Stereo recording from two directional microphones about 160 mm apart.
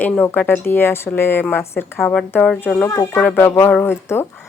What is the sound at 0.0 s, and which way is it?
A woman's voice, 10° left (ahead or behind).